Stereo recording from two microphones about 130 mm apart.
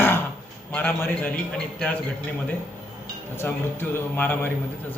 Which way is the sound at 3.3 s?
20° left (ahead or behind).